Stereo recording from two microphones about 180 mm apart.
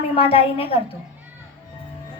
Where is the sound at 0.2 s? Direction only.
30° left (ahead or behind).